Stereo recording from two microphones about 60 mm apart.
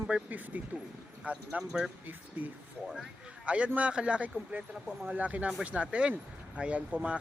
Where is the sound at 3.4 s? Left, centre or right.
Centre.